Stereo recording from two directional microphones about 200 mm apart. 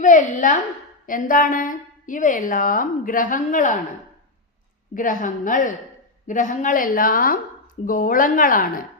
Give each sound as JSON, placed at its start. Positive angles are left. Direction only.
{"t": 0.0, "sound": "a woman's voice", "side_deg": 40}
{"t": 4.9, "sound": "a woman's voice", "side_deg": 40}